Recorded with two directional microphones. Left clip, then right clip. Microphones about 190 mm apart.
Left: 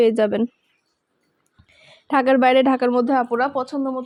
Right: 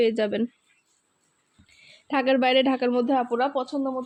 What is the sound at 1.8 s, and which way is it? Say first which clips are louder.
Speech: left 6 dB; 15° left (ahead or behind).